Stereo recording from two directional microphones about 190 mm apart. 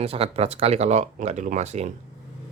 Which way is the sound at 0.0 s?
30° right (ahead or behind).